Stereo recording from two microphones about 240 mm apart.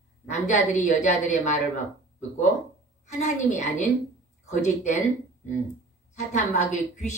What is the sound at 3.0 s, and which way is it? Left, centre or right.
A woman's voice, left.